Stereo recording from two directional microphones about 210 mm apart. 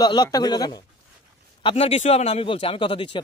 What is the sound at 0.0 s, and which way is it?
A man's voice, 20° left (ahead or behind).